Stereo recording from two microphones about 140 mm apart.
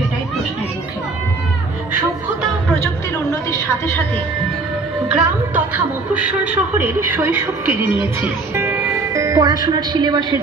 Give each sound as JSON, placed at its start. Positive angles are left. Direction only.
{"t": 5.0, "sound": "a woman's voice", "side_deg": -5}